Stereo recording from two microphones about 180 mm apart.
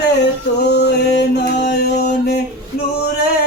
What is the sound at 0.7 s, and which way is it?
Mantra, 65° left (ahead or behind).